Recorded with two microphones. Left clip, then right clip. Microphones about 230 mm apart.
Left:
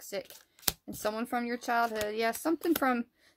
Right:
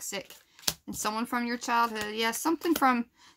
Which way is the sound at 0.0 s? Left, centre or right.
Centre.